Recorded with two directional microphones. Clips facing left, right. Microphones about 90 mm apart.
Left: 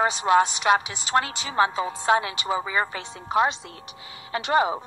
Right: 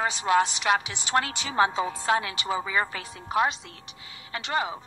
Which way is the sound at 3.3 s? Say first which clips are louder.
Left 3 dB; centre (ahead or behind).